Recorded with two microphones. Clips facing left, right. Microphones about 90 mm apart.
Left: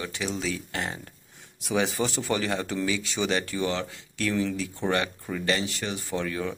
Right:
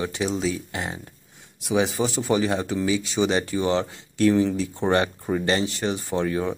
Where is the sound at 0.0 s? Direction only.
25° right (ahead or behind).